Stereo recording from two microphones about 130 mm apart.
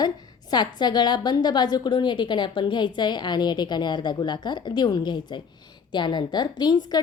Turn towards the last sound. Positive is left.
turn(degrees=35)  # may be behind; listen again after turning